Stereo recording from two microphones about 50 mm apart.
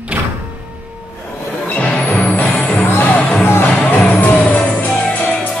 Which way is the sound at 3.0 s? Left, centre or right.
Left.